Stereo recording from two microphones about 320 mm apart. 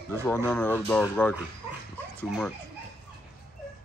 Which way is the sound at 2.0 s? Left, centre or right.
Centre.